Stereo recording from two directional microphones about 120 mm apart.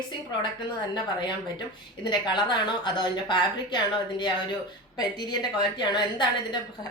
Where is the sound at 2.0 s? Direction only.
40° left (ahead or behind).